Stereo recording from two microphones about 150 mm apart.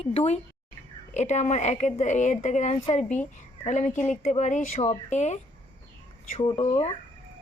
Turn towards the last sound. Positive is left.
turn(degrees=45)  # may be behind; listen again after turning